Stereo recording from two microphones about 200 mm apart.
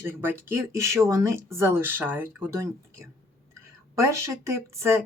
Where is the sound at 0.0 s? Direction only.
10° right (ahead or behind).